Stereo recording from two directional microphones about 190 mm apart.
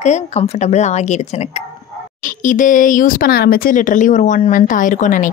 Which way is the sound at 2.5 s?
45° left (ahead or behind).